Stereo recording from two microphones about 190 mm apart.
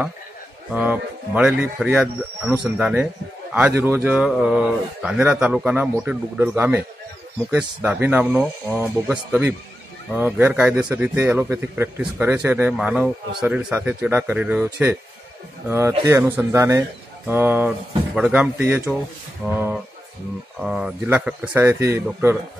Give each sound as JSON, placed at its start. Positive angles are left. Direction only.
{"t": 0.7, "sound": "a man's voice", "side_deg": -10}
{"t": 7.8, "sound": "a man's voice", "side_deg": -10}
{"t": 16.1, "sound": "a man's voice", "side_deg": -15}